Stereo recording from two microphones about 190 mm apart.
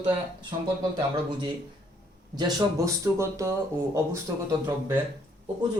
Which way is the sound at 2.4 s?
20° right (ahead or behind).